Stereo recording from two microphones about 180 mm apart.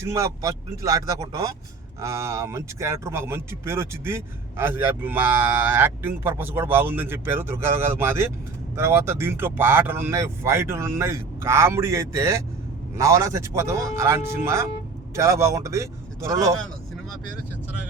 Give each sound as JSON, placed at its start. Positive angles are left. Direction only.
{"t": 0.0, "sound": "a man's voice", "side_deg": -15}